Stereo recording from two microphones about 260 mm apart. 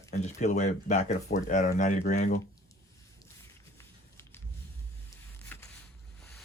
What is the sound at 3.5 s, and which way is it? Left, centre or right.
Walk, centre.